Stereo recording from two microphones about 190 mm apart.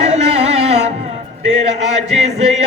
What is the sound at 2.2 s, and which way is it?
Chant, 35° right (ahead or behind).